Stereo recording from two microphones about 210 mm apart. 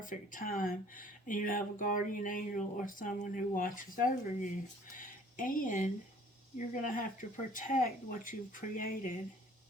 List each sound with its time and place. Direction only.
0.0 s speech: 40° left (ahead or behind)